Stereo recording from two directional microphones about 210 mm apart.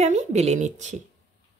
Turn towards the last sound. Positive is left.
turn(degrees=-35)  # may be behind; listen again after turning